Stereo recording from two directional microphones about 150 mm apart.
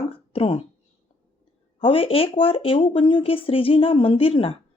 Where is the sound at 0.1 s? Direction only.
35° left (ahead or behind).